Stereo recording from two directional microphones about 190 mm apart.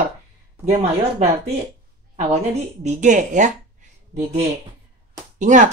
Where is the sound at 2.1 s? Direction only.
35° right (ahead or behind).